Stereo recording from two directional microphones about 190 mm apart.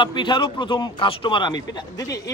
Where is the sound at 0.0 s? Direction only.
25° left (ahead or behind).